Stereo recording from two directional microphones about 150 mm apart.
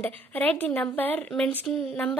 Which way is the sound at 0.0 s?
10° left (ahead or behind).